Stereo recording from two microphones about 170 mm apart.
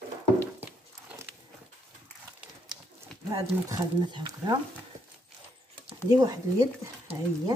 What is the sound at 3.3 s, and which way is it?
Speech, 20° right (ahead or behind).